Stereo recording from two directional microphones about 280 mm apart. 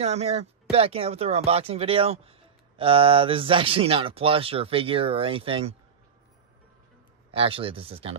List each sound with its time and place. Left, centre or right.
0.0 s speech: right
7.3 s speech: centre